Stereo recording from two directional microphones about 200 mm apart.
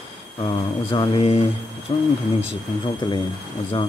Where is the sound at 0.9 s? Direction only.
30° left (ahead or behind).